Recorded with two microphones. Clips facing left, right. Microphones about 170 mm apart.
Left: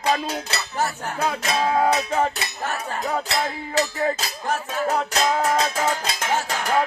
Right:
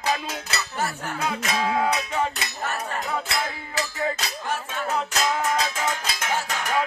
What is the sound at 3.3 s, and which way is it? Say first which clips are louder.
Music: left 3 dB; 20° left (ahead or behind).